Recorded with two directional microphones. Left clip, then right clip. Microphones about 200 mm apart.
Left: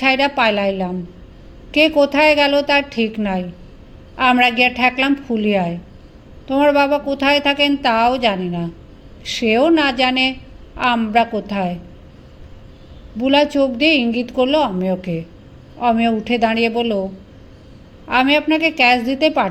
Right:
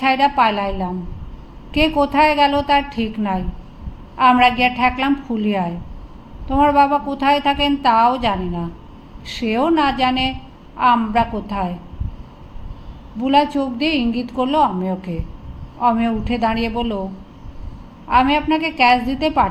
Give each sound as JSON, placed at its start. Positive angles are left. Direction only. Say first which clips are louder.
{"t": 0.0, "sound": "a woman's voice", "louder": "even", "side_deg": 35}
{"t": 13.1, "sound": "a woman's voice", "louder": "left 2 dB", "side_deg": 35}
{"t": 18.1, "sound": "a woman's voice", "louder": "even", "side_deg": 35}